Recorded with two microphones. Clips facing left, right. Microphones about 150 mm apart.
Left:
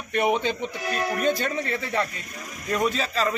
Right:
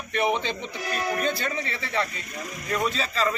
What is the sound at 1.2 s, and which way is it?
Speech, 45° left (ahead or behind).